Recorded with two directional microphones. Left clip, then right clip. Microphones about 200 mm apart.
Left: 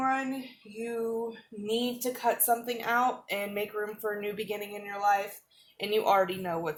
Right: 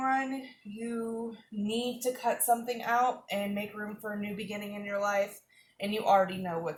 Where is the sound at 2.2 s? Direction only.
50° left (ahead or behind).